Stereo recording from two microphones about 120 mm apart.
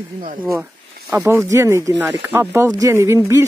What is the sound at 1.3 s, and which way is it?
Speech, 20° right (ahead or behind).